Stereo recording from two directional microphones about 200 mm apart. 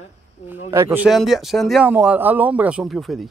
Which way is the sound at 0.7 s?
15° right (ahead or behind).